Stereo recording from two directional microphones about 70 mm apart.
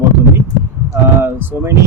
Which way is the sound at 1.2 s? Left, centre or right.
Right.